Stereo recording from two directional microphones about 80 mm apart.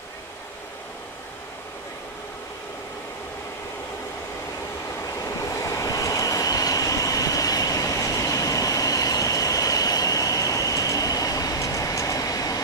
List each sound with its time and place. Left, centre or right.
5.2 s train: left